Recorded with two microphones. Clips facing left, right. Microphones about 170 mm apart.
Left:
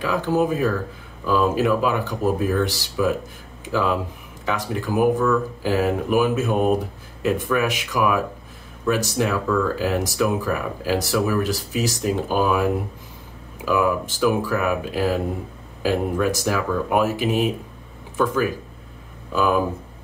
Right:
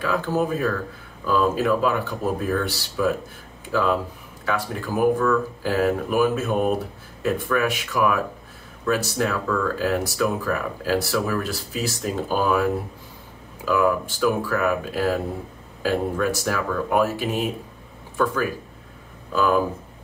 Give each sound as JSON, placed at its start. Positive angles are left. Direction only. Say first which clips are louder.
{"t": 0.0, "sound": "speech", "louder": "left 2 dB", "side_deg": 15}
{"t": 4.5, "sound": "speech", "louder": "left 1 dB", "side_deg": 15}